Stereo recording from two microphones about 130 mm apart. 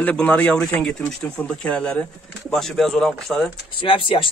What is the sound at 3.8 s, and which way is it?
Speech, 40° left (ahead or behind).